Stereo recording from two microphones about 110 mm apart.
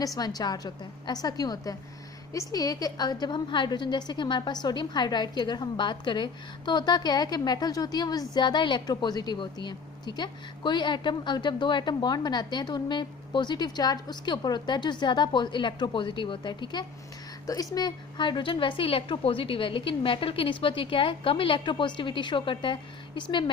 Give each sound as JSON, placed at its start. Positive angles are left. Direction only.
{"t": 0.0, "sound": "a woman's voice", "side_deg": 35}